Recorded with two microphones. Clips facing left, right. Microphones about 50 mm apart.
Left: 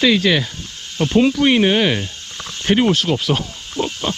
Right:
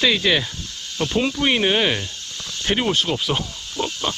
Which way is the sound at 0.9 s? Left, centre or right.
Centre.